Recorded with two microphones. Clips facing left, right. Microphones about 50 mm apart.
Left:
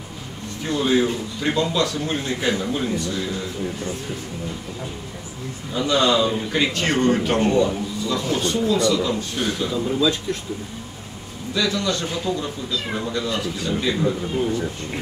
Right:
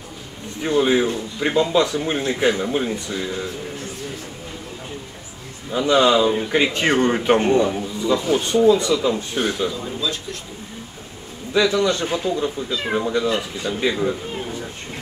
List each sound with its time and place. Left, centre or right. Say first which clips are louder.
0.7 s a man's voice: right 2 dB; right
5.7 s a man's voice: right 3 dB; centre
11.5 s a man's voice: right 5 dB; right